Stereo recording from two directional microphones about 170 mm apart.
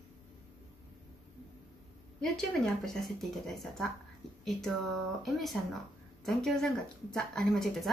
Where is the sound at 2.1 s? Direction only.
5° left (ahead or behind).